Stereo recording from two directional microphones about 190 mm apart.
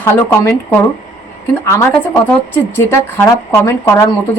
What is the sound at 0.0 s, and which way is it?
A woman's voice, 10° left (ahead or behind).